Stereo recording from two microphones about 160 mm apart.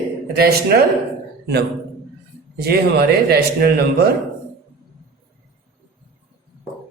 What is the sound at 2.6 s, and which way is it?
A man's voice, 80° right.